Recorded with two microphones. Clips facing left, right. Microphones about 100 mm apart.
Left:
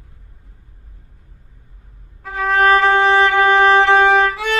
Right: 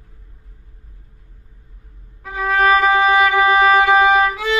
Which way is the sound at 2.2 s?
5° right (ahead or behind).